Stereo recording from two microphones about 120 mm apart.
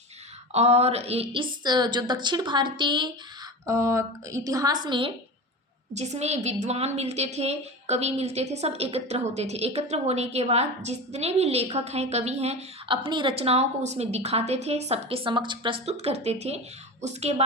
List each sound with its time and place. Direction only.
0.5 s a woman's voice: 60° right (ahead or behind); by 3.1 s 40° right (ahead or behind)
3.7 s a woman's voice: 25° right (ahead or behind); by 5.1 s 45° right (ahead or behind)
5.9 s a woman's voice: 70° right (ahead or behind)
12.9 s a woman's voice: 40° right (ahead or behind)
13.3 s a woman's voice: 60° right (ahead or behind); by 15.8 s 40° right (ahead or behind)
15.9 s a woman's voice: 60° right (ahead or behind)